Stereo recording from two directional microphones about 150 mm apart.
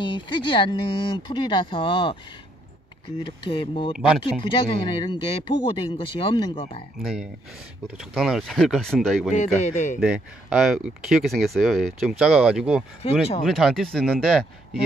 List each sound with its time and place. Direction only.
0.0 s speech: 35° left (ahead or behind)
3.2 s speech: 35° left (ahead or behind)
7.8 s speech: centre (ahead or behind)
9.3 s a man's voice: 50° left (ahead or behind)
9.9 s speech: 5° right (ahead or behind)
13.0 s speech: 40° left (ahead or behind)
13.4 s speech: centre (ahead or behind)